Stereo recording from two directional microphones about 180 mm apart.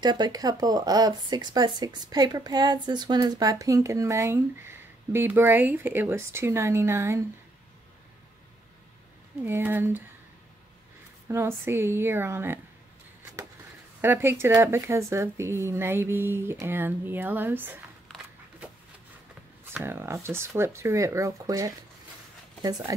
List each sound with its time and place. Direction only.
0.0 s speech: 25° right (ahead or behind)
9.4 s speech: 10° right (ahead or behind)
11.2 s speech: 15° right (ahead or behind)
14.0 s speech: 10° right (ahead or behind)
18.0 s a sound: centre (ahead or behind)
19.6 s speech: 10° right (ahead or behind)